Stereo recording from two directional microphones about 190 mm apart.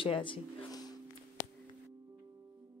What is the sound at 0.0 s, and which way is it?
Speech, 25° left (ahead or behind).